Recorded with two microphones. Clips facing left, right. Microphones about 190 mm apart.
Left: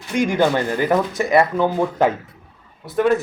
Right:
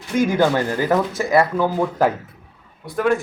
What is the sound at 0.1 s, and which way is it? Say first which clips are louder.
Speech: even; 20° left (ahead or behind).